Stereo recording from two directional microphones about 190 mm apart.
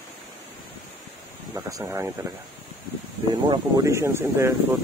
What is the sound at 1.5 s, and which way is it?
Speech, 15° right (ahead or behind).